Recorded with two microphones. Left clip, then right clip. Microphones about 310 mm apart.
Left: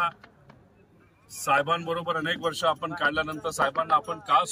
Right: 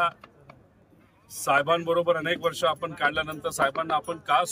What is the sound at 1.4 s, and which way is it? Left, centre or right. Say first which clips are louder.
A man's voice: right 1 dB; centre.